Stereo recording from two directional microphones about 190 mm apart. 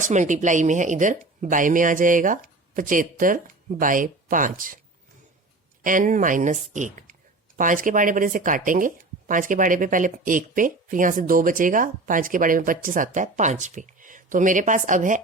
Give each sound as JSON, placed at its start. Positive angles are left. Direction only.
{"t": 0.0, "sound": "speech", "side_deg": -40}
{"t": 5.8, "sound": "speech", "side_deg": -45}